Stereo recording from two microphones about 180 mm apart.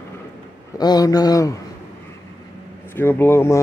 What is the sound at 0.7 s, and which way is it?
Speech, 20° left (ahead or behind).